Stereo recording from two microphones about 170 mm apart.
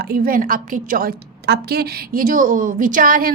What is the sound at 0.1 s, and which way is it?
A woman's voice, 60° right (ahead or behind).